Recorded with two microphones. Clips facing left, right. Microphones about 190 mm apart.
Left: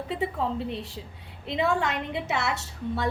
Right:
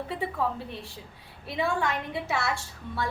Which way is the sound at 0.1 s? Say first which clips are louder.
Left 3 dB; 25° left (ahead or behind).